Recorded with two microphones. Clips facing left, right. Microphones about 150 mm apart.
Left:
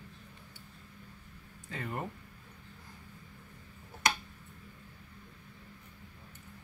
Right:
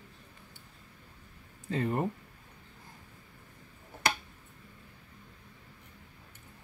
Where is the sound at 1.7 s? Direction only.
30° right (ahead or behind).